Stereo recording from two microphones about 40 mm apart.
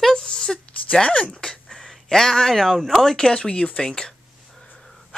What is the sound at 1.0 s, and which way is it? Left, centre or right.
Speech, left.